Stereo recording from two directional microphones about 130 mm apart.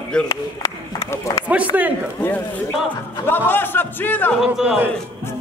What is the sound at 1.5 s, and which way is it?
Speech, 10° right (ahead or behind).